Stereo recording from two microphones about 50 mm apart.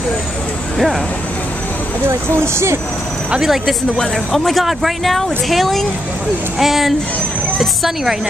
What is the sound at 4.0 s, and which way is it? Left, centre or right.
Speech, centre.